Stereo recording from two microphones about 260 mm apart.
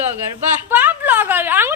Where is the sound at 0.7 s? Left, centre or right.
Centre.